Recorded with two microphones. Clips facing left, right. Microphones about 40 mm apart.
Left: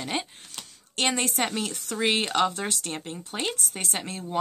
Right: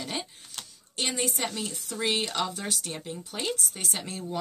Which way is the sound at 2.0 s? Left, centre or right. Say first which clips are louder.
Left 5 dB; left.